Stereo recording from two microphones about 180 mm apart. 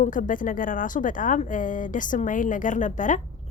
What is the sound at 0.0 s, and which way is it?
A woman's voice, 45° left (ahead or behind).